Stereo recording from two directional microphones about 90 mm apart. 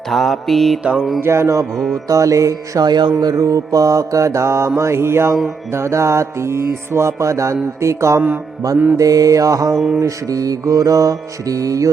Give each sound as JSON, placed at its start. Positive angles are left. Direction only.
{"t": 0.1, "sound": "mantra", "side_deg": 0}
{"t": 1.2, "sound": "music", "side_deg": -30}
{"t": 4.8, "sound": "mantra", "side_deg": -30}
{"t": 5.7, "sound": "music", "side_deg": -30}
{"t": 9.7, "sound": "mantra", "side_deg": -5}
{"t": 10.0, "sound": "music", "side_deg": -40}